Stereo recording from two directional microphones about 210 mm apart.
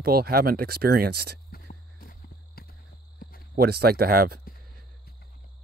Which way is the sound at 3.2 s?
45° left (ahead or behind).